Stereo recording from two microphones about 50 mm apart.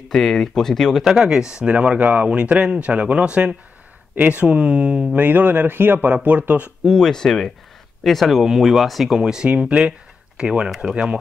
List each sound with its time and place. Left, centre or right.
0.1 s speech: centre
1.0 s speech: centre
1.7 s speech: right
5.1 s speech: right
6.9 s speech: centre
9.2 s speech: centre